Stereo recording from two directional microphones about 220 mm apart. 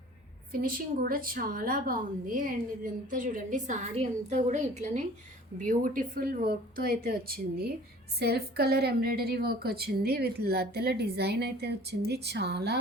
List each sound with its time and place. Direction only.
0.6 s a woman's voice: 40° right (ahead or behind)